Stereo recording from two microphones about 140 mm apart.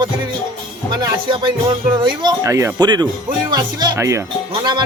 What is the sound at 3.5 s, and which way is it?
Speech, 30° right (ahead or behind).